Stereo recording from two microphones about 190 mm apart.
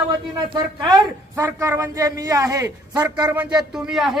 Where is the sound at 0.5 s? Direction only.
20° right (ahead or behind).